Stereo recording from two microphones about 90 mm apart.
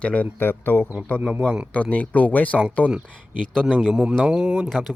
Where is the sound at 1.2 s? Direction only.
20° right (ahead or behind).